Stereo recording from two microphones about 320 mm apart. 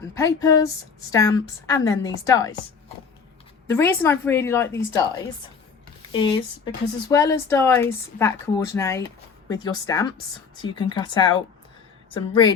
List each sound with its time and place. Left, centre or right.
0.1 s speech: centre
3.7 s speech: centre
6.1 s speech: centre